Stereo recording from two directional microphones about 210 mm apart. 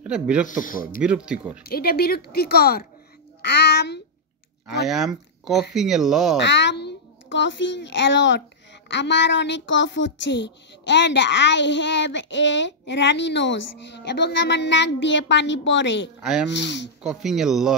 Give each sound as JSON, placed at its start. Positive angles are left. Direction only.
{"t": 0.0, "sound": "speech", "side_deg": -5}
{"t": 0.5, "sound": "speech", "side_deg": 40}
{"t": 1.0, "sound": "speech", "side_deg": -5}
{"t": 1.6, "sound": "a child's voice", "side_deg": 45}
{"t": 4.8, "sound": "speech", "side_deg": 0}
{"t": 6.4, "sound": "a child's voice", "side_deg": 55}
{"t": 16.2, "sound": "speech", "side_deg": -5}
{"t": 16.4, "sound": "speech", "side_deg": 55}
{"t": 17.0, "sound": "speech", "side_deg": 0}